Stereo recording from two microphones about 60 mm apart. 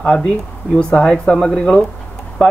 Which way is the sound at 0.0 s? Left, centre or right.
Left.